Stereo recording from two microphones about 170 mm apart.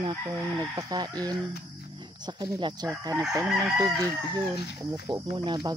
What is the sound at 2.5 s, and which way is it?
Speech, 25° right (ahead or behind).